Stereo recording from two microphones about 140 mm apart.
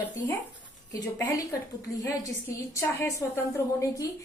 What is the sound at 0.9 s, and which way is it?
Speech, 25° left (ahead or behind).